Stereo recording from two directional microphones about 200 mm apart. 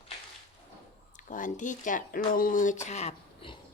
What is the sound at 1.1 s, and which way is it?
Speech, 40° left (ahead or behind).